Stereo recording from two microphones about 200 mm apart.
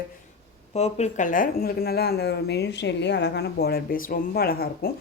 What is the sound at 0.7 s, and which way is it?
Speech, 35° left (ahead or behind).